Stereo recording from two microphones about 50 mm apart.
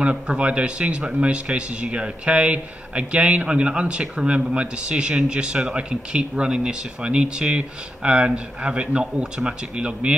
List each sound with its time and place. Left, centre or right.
0.0 s a man's voice: right